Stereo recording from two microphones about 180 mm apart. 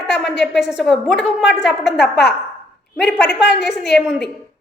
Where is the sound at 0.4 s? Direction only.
Centre (ahead or behind).